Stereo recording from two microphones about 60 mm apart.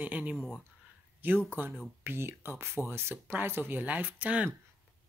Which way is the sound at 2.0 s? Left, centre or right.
Right.